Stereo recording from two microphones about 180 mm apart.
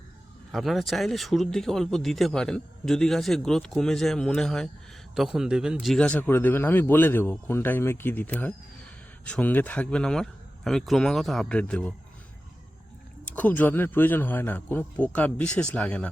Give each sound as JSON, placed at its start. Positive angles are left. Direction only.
{"t": 0.5, "sound": "speech", "side_deg": 0}
{"t": 13.3, "sound": "speech", "side_deg": 10}